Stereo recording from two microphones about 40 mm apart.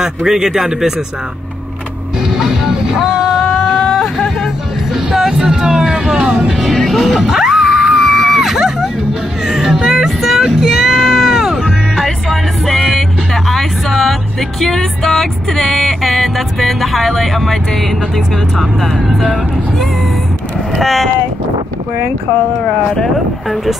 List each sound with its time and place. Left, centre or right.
0.0 s a man's voice: centre
2.3 s music: centre
3.6 s whimper: centre
5.3 s vehicle: centre
6.9 s music: centre
7.2 s music: centre
8.0 s screaming: centre
9.8 s speech: centre
10.5 s music: centre
13.5 s a sound: centre
14.6 s music: centre
20.7 s music: centre
23.5 s music: centre